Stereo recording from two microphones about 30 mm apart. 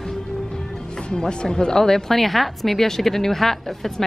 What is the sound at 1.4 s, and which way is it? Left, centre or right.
Speech, left.